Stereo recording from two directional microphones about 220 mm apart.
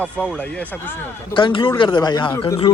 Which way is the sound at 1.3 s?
20° left (ahead or behind).